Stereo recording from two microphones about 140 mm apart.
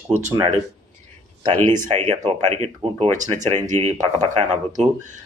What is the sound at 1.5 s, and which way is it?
Speech, 30° right (ahead or behind).